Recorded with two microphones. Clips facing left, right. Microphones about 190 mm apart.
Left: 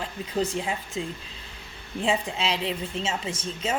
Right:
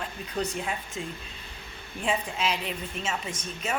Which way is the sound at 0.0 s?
25° left (ahead or behind).